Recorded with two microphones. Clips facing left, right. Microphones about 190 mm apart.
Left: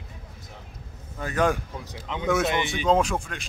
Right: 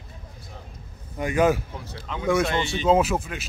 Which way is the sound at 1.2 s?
10° right (ahead or behind).